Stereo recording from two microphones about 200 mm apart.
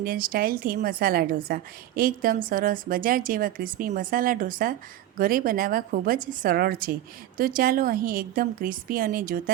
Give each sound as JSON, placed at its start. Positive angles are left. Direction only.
{"t": 0.0, "sound": "a woman's voice", "side_deg": -45}